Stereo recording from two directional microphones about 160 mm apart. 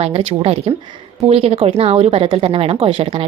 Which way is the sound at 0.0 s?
40° right (ahead or behind).